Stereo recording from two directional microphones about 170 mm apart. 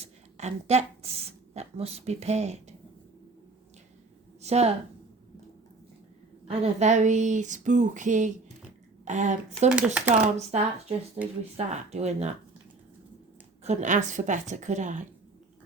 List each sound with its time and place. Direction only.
0.0 s speech: 40° right (ahead or behind)
4.4 s speech: 40° right (ahead or behind)
6.5 s speech: 40° right (ahead or behind)
9.6 s speech: 5° right (ahead or behind)
10.1 s speech: 40° right (ahead or behind)
13.7 s speech: 45° right (ahead or behind)